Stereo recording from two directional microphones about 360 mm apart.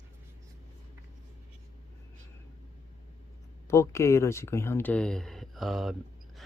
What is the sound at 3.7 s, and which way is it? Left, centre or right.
Speech, centre.